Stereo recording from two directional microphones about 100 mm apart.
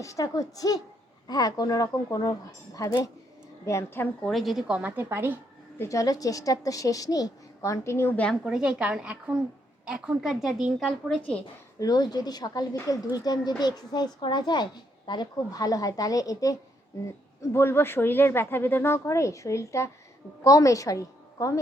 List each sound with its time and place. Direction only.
0.0 s a woman's voice: 35° left (ahead or behind)
4.3 s speech: centre (ahead or behind); by 5.4 s 25° right (ahead or behind)
5.8 s a woman's voice: 35° left (ahead or behind)
8.1 s speech: 15° left (ahead or behind)
8.4 s a woman's voice: 5° right (ahead or behind)
11.8 s a woman's voice: 40° left (ahead or behind)
17.4 s a woman's voice: 25° left (ahead or behind)